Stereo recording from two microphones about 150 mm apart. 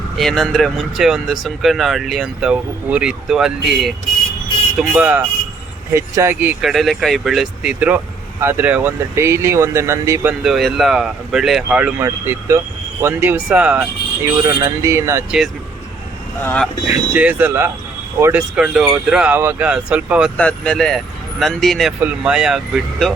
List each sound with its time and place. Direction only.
0.2 s speech: centre (ahead or behind); by 10.3 s 20° right (ahead or behind)
10.4 s speech: centre (ahead or behind)
14.3 s speech: 20° right (ahead or behind)
16.4 s speech: 10° left (ahead or behind)
17.2 s speech: 10° right (ahead or behind)
20.3 s speech: 10° left (ahead or behind)